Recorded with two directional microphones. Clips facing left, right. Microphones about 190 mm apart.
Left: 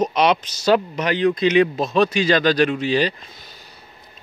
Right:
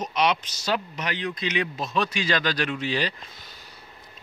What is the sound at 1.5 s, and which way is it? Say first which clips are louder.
Speech: left 10 dB; 35° left (ahead or behind).